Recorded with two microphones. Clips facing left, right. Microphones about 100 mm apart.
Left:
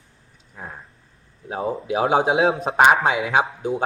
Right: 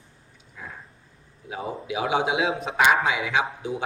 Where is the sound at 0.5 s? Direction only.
40° left (ahead or behind).